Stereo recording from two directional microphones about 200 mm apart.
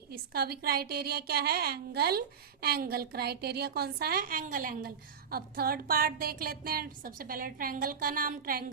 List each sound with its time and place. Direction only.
0.1 s a woman's voice: 50° right (ahead or behind)